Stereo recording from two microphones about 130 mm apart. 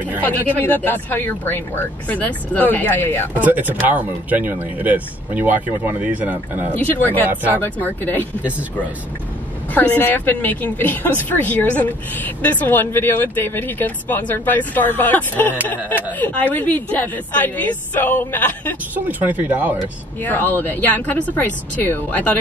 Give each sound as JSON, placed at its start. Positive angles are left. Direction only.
{"t": 0.2, "sound": "a woman's voice", "side_deg": 15}
{"t": 3.3, "sound": "speech", "side_deg": -10}
{"t": 6.8, "sound": "a woman's voice", "side_deg": 15}
{"t": 7.2, "sound": "speech", "side_deg": -15}
{"t": 7.6, "sound": "a woman's voice", "side_deg": 15}
{"t": 9.8, "sound": "a woman's voice", "side_deg": 15}
{"t": 18.9, "sound": "speech", "side_deg": -15}
{"t": 20.2, "sound": "a woman's voice", "side_deg": 15}